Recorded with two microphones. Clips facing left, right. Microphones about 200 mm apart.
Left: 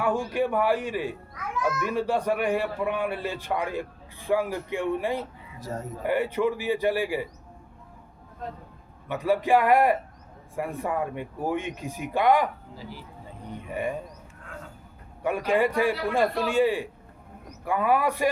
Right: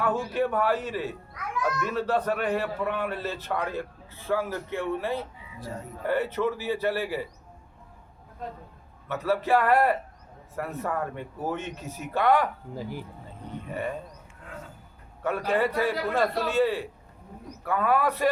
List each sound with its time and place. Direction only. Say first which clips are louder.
0.0 s a man's voice: left 1 dB; 10° left (ahead or behind)
5.5 s speech: left 3 dB; 45° left (ahead or behind)
6.0 s a man's voice: left 1 dB; 15° left (ahead or behind)
9.0 s a man's voice: left 2 dB; 15° left (ahead or behind)
12.7 s speech: right 6 dB; 50° right (ahead or behind)
13.7 s a man's voice: left 2 dB; 15° left (ahead or behind)
15.2 s a man's voice: left 2 dB; 15° left (ahead or behind)